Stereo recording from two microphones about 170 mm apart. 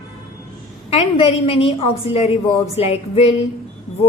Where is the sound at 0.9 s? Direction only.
35° left (ahead or behind).